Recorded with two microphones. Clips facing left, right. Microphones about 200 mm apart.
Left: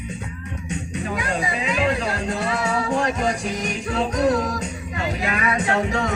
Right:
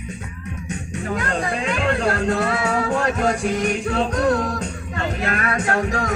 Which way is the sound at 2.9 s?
55° right (ahead or behind).